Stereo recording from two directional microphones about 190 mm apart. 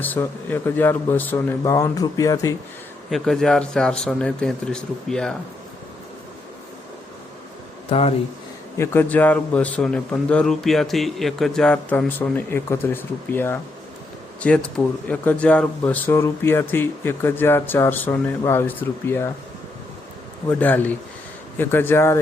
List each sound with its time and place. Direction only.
0.0 s speech: 10° left (ahead or behind)
3.1 s speech: centre (ahead or behind)
7.9 s speech: 30° left (ahead or behind)
8.8 s speech: 10° left (ahead or behind)
20.5 s speech: 10° left (ahead or behind)